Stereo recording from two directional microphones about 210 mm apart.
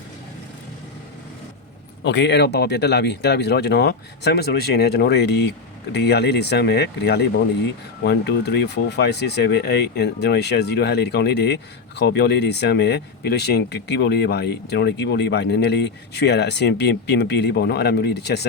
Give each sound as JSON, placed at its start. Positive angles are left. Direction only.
{"t": 2.0, "sound": "speech", "side_deg": 55}